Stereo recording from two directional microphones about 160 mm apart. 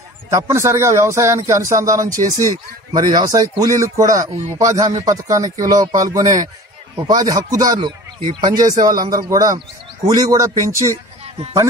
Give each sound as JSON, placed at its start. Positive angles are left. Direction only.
{"t": 0.3, "sound": "speech", "side_deg": -20}
{"t": 7.0, "sound": "speech", "side_deg": -25}